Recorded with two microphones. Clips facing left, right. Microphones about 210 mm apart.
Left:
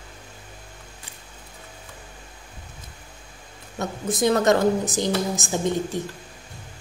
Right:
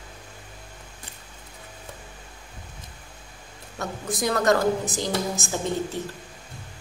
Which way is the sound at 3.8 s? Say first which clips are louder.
Left 5 dB; 25° left (ahead or behind).